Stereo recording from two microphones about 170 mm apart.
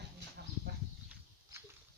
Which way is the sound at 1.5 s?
15° right (ahead or behind).